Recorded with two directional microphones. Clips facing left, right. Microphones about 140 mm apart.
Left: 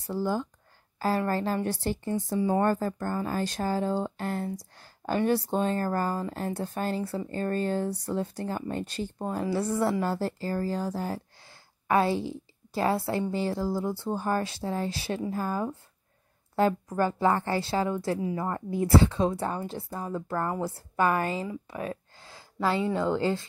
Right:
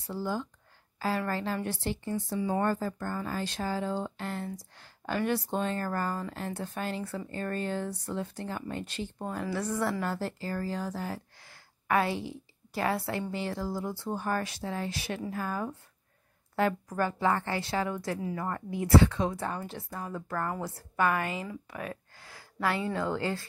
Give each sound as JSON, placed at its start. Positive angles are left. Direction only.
{"t": 0.0, "sound": "a woman's voice", "side_deg": 45}
{"t": 18.7, "sound": "speech", "side_deg": 35}
{"t": 21.6, "sound": "a sound", "side_deg": 30}
{"t": 22.8, "sound": "a woman's voice", "side_deg": 25}